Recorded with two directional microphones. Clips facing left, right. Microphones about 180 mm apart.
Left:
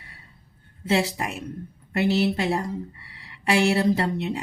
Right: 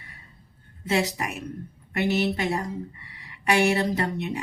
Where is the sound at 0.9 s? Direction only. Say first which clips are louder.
Left 2 dB; 30° left (ahead or behind).